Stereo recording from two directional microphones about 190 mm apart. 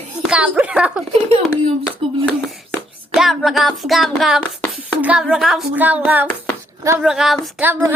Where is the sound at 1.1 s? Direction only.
35° right (ahead or behind).